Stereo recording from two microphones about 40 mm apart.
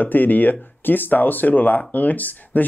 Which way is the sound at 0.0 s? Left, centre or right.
Left.